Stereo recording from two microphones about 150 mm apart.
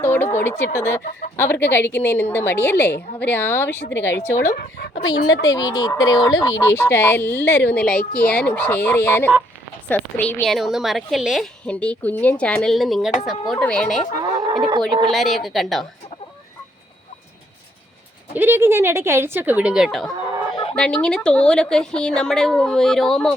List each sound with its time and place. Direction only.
0.0 s a woman's voice: 15° left (ahead or behind)
14.2 s livestock: 25° right (ahead or behind)
15.1 s a woman's voice: centre (ahead or behind)
18.3 s a woman's voice: 15° right (ahead or behind); by 23.3 s 5° left (ahead or behind)